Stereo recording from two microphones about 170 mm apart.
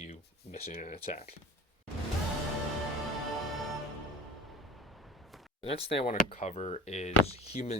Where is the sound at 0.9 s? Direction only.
40° left (ahead or behind).